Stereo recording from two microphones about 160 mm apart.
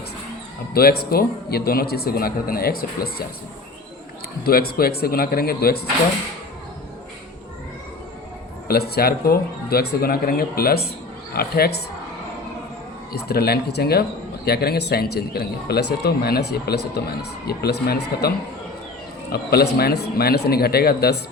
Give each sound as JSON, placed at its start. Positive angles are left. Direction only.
{"t": 0.7, "sound": "speech", "side_deg": 75}
{"t": 4.4, "sound": "speech", "side_deg": 70}
{"t": 8.6, "sound": "speech", "side_deg": 75}
{"t": 13.2, "sound": "speech", "side_deg": 80}
{"t": 19.3, "sound": "speech", "side_deg": 75}